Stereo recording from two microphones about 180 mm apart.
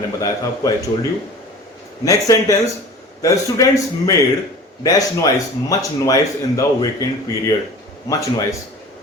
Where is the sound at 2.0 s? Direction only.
20° left (ahead or behind).